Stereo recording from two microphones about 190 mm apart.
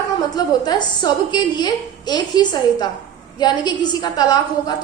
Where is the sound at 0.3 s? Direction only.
20° left (ahead or behind).